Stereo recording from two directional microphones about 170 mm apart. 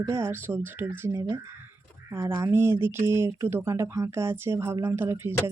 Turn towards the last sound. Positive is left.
turn(degrees=-15)  # may be behind; listen again after turning